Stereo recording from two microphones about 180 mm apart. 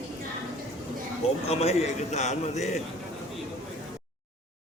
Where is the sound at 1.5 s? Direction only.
35° left (ahead or behind).